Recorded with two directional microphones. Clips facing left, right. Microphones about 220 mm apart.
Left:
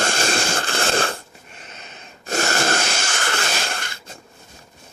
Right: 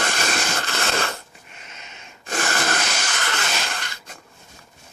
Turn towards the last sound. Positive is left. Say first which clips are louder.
# left 2 dB
turn(degrees=25)  # may be behind; listen again after turning